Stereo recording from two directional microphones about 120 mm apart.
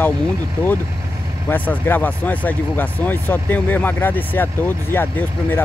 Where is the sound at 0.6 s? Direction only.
10° left (ahead or behind).